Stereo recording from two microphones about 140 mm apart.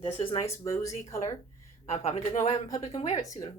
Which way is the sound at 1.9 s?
55° left (ahead or behind).